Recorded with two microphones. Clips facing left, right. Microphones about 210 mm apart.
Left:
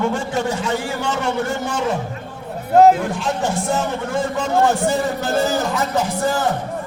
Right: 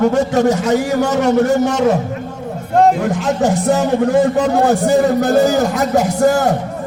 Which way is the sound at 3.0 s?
40° right (ahead or behind).